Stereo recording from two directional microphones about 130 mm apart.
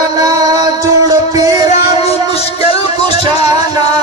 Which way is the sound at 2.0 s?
50° left (ahead or behind).